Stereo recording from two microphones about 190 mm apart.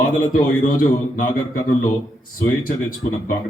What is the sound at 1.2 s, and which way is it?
Speech, 45° left (ahead or behind).